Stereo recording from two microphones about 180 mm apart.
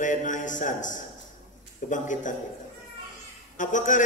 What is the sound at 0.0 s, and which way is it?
A man's voice, 45° left (ahead or behind).